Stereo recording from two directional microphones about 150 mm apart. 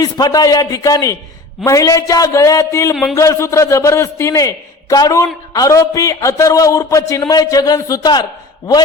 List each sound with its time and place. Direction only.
0.0 s a man's voice: 25° left (ahead or behind)
2.9 s speech: centre (ahead or behind)
3.2 s a man's voice: 20° left (ahead or behind)